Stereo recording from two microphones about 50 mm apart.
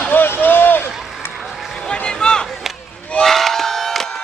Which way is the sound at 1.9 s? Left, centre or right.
Centre.